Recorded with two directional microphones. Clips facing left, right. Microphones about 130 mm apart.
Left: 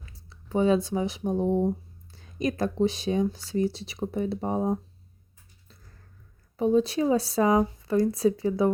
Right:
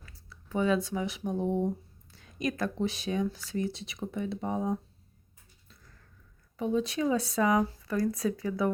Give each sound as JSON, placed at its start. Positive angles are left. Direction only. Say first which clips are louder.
{"t": 0.3, "sound": "speech", "louder": "left 5 dB", "side_deg": 30}
{"t": 6.6, "sound": "speech", "louder": "left 6 dB", "side_deg": 35}